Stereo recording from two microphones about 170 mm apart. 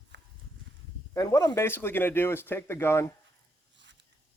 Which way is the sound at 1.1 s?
20° left (ahead or behind).